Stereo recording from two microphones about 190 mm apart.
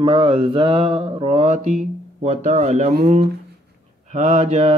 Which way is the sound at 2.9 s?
55° right (ahead or behind).